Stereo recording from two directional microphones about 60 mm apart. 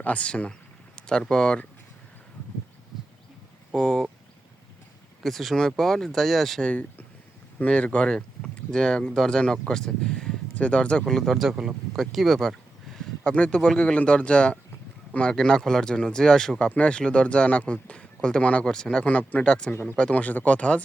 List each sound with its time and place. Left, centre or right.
0.0 s speech: left
0.9 s a sound: centre
1.2 s speech: centre
3.7 s speech: centre
5.2 s speech: centre
6.6 s speech: centre
13.3 s speech: centre